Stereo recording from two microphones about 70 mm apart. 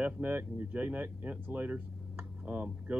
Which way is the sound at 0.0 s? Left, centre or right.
Right.